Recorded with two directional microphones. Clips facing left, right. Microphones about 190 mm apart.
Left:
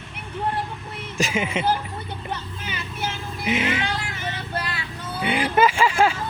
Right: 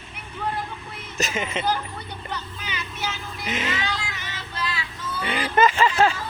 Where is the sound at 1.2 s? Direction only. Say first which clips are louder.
Left 3 dB; 10° left (ahead or behind).